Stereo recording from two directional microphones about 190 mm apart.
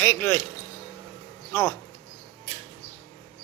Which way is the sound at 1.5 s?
15° left (ahead or behind).